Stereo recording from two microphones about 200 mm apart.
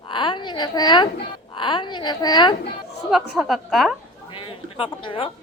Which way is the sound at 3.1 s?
Centre (ahead or behind).